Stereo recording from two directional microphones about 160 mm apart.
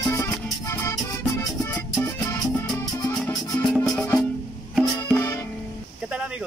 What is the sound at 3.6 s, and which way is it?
Music, 5° left (ahead or behind).